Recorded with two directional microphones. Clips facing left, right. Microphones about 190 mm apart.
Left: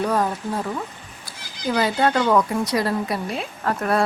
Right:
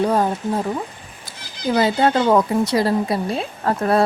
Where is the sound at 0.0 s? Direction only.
25° right (ahead or behind).